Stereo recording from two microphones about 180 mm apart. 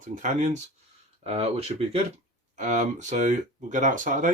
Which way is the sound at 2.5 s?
40° right (ahead or behind).